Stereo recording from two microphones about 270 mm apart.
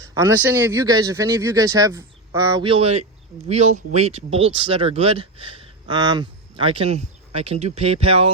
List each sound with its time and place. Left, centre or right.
0.0 s speech: centre